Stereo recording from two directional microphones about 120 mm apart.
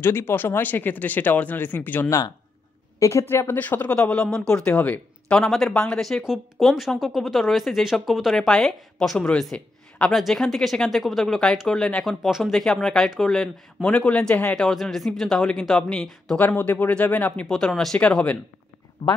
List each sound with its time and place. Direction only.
0.0 s speech: 20° left (ahead or behind)